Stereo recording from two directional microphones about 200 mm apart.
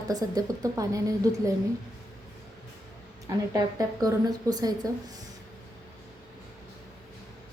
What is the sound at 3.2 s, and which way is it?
A woman's voice, 15° right (ahead or behind).